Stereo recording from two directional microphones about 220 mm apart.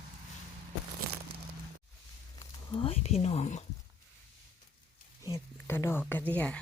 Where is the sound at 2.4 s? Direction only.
25° left (ahead or behind).